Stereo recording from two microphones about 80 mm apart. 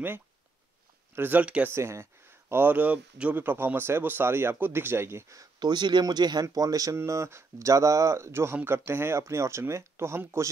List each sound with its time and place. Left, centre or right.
1.1 s speech: right
1.7 s speech: right
5.6 s speech: right
6.4 s speech: right
7.0 s speech: right